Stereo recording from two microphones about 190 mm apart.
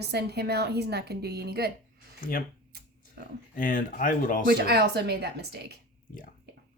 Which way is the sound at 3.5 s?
45° left (ahead or behind).